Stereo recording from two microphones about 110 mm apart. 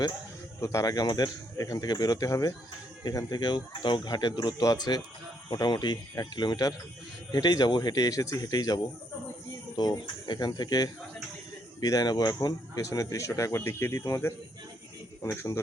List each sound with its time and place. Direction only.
0.6 s speech: 30° left (ahead or behind)
15.3 s speech: 20° left (ahead or behind)